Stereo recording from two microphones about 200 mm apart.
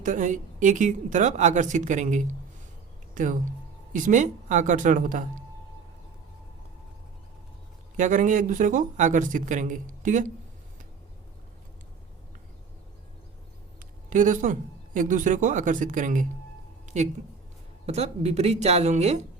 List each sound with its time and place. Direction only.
0.0 s speech: 40° right (ahead or behind)
7.9 s speech: 40° right (ahead or behind)
14.1 s speech: 40° right (ahead or behind)
16.8 s a sound: 35° right (ahead or behind)
17.8 s speech: 35° right (ahead or behind)